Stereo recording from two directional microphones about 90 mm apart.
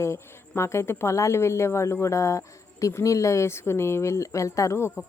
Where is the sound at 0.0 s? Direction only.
30° left (ahead or behind).